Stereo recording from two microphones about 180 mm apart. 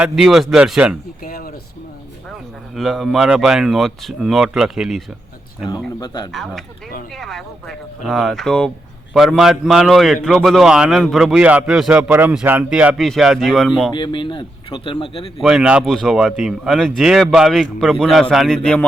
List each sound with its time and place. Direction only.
0.0 s a man's voice: centre (ahead or behind)
1.2 s speech: 50° left (ahead or behind)
2.3 s a man's voice: centre (ahead or behind)
6.3 s a man's voice: centre (ahead or behind)
13.9 s speech: 25° left (ahead or behind)
15.4 s a man's voice: 5° right (ahead or behind)